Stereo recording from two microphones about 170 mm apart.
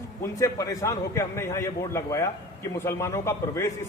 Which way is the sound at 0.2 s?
20° left (ahead or behind).